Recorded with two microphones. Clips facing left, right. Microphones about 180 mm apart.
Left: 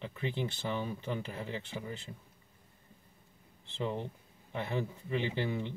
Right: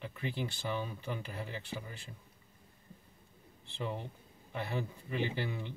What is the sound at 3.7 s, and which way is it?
Speech, 20° left (ahead or behind).